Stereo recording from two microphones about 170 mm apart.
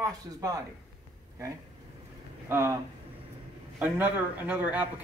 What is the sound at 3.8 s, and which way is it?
Speech, 10° right (ahead or behind).